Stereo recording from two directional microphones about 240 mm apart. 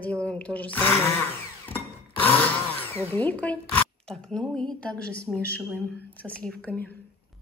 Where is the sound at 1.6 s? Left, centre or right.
Centre.